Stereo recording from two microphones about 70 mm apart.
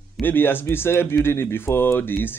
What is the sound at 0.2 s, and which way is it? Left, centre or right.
Speech, left.